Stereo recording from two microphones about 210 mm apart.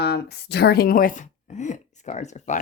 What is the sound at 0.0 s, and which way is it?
Speech, 50° left (ahead or behind).